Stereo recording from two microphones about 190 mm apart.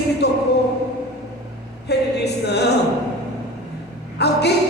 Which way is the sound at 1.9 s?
60° left (ahead or behind).